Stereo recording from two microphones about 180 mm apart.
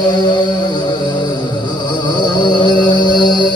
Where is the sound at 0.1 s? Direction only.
25° left (ahead or behind).